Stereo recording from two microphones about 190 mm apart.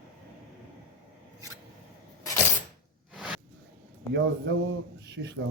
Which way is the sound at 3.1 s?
5° right (ahead or behind).